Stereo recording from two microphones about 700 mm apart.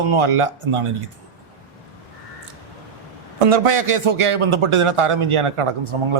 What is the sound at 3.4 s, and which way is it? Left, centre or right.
Speech, right.